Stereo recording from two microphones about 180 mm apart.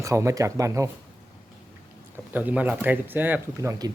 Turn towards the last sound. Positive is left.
turn(degrees=-10)  # may be behind; listen again after turning